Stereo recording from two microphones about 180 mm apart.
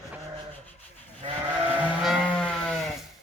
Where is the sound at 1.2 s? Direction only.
30° right (ahead or behind).